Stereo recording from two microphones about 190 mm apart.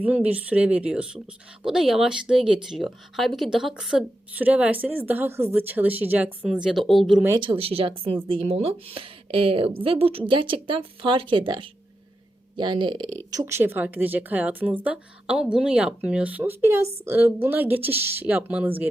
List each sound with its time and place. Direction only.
0.0 s a woman's voice: 10° right (ahead or behind)
7.3 s speech: 30° right (ahead or behind)
13.3 s a woman's voice: 15° right (ahead or behind)